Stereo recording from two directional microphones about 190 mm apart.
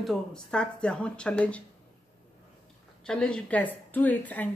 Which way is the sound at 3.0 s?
5° left (ahead or behind).